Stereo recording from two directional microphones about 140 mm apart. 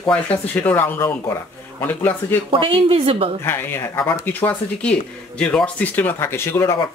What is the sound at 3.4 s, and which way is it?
Speech, 15° left (ahead or behind).